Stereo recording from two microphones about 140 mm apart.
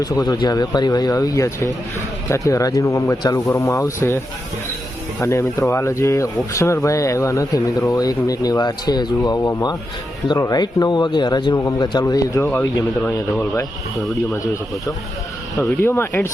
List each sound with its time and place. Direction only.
0.0 s speech: 30° left (ahead or behind)
5.2 s speech: 20° left (ahead or behind)
15.5 s speech: 15° left (ahead or behind)